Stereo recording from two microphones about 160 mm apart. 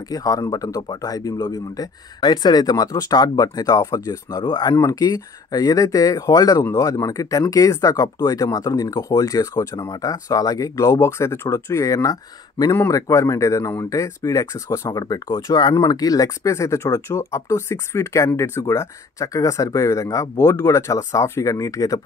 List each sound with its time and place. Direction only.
0.1 s speech: 20° left (ahead or behind)